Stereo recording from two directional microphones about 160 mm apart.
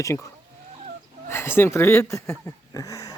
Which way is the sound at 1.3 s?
15° left (ahead or behind).